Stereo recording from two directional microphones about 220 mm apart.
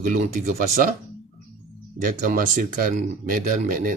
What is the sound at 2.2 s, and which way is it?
Speech, 35° right (ahead or behind).